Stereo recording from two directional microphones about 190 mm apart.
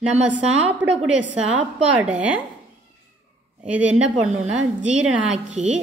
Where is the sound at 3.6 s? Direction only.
5° right (ahead or behind).